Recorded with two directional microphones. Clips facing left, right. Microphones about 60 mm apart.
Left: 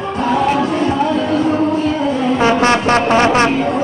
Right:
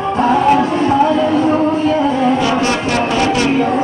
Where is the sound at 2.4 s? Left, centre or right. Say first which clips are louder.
Left 2 dB; left.